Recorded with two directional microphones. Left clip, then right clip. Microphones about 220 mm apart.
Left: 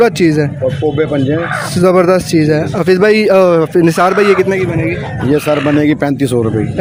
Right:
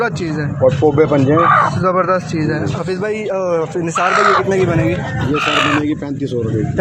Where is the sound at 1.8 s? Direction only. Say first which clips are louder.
Left 5 dB; 45° left (ahead or behind).